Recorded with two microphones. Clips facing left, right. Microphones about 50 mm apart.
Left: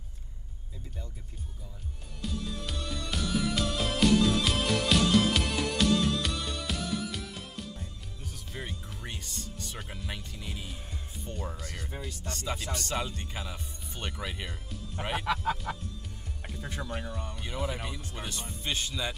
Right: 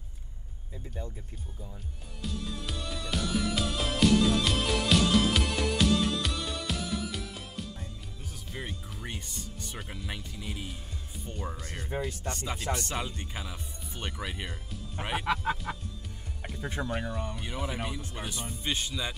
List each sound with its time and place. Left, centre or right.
2.2 s music: centre
9.2 s speech: centre
9.8 s speech: centre
11.6 s speech: right
12.9 s speech: centre
15.5 s music: centre
16.8 s speech: centre